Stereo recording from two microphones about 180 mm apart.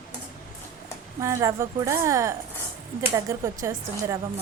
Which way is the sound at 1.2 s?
15° right (ahead or behind).